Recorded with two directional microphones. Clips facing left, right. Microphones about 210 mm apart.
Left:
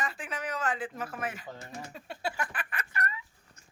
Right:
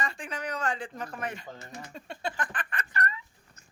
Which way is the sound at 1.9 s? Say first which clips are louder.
Right 1 dB; 5° left (ahead or behind).